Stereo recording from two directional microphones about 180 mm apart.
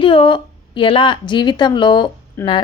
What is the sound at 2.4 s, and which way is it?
Speech, 15° left (ahead or behind).